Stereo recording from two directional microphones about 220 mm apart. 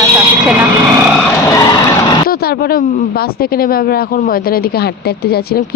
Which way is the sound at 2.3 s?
45° left (ahead or behind).